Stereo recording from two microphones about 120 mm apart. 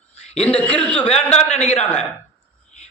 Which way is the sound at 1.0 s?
60° left (ahead or behind).